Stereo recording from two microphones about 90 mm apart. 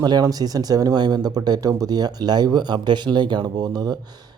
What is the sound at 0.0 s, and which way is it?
Speech, 45° right (ahead or behind).